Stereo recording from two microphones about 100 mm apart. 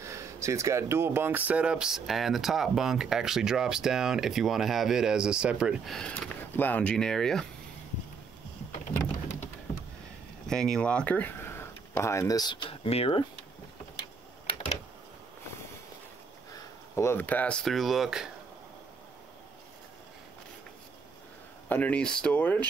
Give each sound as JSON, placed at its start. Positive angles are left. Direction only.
{"t": 0.0, "sound": "speech", "side_deg": -30}
{"t": 5.9, "sound": "speech", "side_deg": 5}
{"t": 6.5, "sound": "speech", "side_deg": 15}
{"t": 10.5, "sound": "speech", "side_deg": 5}
{"t": 14.4, "sound": "a sound", "side_deg": 65}
{"t": 16.5, "sound": "speech", "side_deg": 30}
{"t": 21.6, "sound": "speech", "side_deg": 15}